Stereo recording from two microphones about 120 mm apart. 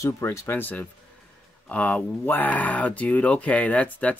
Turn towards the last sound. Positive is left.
turn(degrees=10)  # may be behind; listen again after turning